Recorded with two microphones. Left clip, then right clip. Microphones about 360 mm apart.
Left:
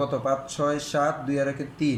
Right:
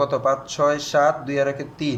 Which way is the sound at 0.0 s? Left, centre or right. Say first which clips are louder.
Right 5 dB; right.